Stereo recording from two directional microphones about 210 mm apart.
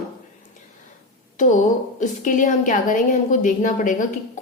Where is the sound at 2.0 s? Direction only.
35° left (ahead or behind).